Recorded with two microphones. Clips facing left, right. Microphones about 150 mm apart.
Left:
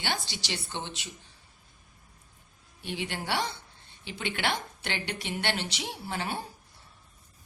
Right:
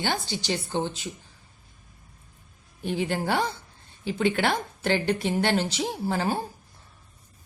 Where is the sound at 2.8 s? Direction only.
40° right (ahead or behind).